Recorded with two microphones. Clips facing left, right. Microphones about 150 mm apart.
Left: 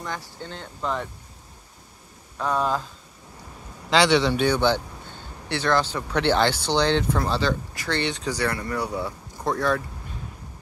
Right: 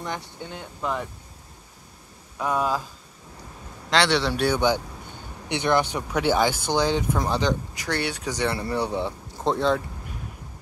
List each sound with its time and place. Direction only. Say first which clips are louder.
0.0 s speech: right 1 dB; 20° right (ahead or behind)
2.3 s speech: even; 10° right (ahead or behind)
3.9 s a man's voice: left 3 dB; centre (ahead or behind); by 8.5 s 20° right (ahead or behind)
8.5 s speech: right 2 dB; 30° right (ahead or behind)